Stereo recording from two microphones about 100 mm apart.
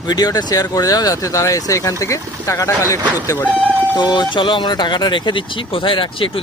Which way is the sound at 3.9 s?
45° left (ahead or behind).